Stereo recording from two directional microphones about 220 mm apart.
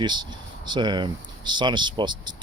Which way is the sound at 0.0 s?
20° right (ahead or behind).